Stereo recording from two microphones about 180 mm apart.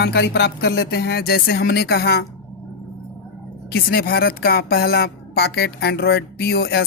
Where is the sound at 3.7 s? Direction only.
60° left (ahead or behind).